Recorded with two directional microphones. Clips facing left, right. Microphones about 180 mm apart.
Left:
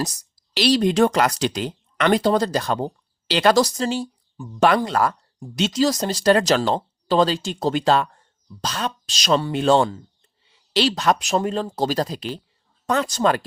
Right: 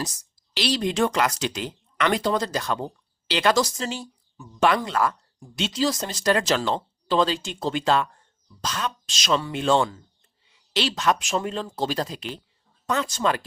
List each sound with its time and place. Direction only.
0.0 s speech: 35° left (ahead or behind)